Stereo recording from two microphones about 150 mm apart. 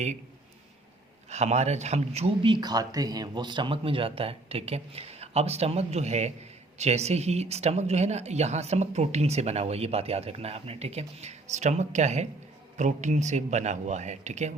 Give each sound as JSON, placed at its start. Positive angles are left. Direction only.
{"t": 1.3, "sound": "speech", "side_deg": -50}